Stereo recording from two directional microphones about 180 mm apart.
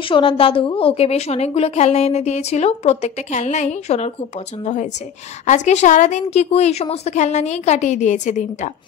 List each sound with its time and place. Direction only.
0.1 s a woman's voice: 30° left (ahead or behind)
5.5 s a woman's voice: 40° left (ahead or behind)